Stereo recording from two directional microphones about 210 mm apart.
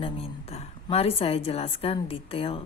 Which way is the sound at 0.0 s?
30° left (ahead or behind).